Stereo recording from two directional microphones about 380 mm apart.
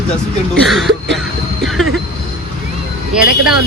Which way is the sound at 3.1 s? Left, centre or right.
Centre.